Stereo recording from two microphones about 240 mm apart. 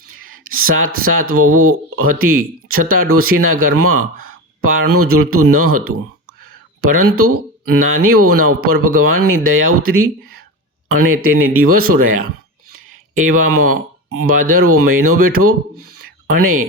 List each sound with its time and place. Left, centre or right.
0.5 s speech: right
6.9 s speech: right
13.1 s speech: right